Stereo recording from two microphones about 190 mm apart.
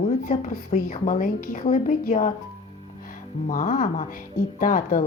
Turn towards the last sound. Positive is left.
turn(degrees=45)  # may be behind; listen again after turning